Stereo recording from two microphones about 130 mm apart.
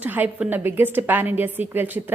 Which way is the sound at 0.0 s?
15° right (ahead or behind).